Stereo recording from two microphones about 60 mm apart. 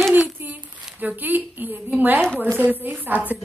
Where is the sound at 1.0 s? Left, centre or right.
Right.